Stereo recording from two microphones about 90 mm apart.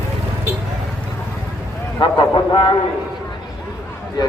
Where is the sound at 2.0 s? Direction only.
65° left (ahead or behind).